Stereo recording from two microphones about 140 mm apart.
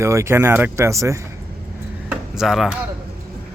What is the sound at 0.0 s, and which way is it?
Speech, 20° right (ahead or behind).